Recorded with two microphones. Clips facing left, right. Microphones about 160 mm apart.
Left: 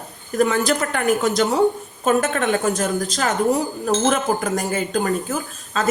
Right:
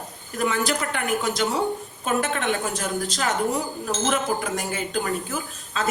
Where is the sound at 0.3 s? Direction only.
40° left (ahead or behind).